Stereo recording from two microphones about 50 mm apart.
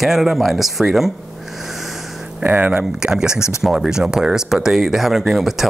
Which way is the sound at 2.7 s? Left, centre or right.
Centre.